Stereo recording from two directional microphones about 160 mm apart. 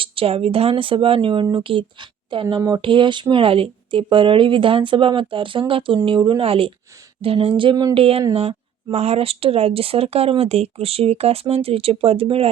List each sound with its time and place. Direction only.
0.0 s speech: 35° right (ahead or behind)